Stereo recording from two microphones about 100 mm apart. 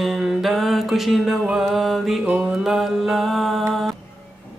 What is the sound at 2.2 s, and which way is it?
Music, 15° right (ahead or behind).